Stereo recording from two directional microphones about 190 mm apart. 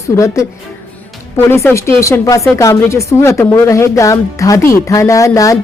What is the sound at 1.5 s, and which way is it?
Speech, 15° left (ahead or behind).